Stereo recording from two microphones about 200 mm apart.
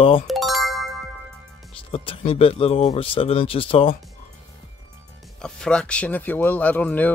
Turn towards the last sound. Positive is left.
turn(degrees=10)  # may be behind; listen again after turning